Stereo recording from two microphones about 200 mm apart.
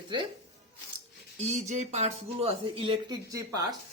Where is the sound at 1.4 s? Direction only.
35° right (ahead or behind).